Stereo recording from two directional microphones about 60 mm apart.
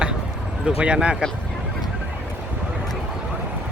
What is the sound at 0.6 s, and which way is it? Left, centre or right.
Speech, centre.